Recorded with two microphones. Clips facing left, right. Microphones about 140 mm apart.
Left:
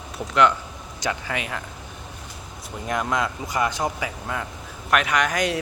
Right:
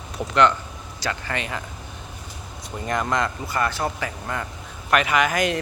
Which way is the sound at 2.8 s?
5° left (ahead or behind).